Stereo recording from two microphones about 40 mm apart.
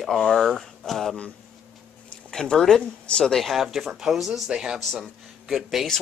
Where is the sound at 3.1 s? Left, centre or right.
Centre.